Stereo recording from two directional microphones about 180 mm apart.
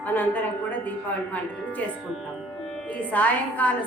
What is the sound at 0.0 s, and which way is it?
A woman's voice, 10° left (ahead or behind).